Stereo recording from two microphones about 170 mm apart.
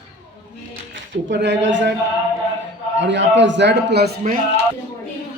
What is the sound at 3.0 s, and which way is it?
A man's voice, 90° right.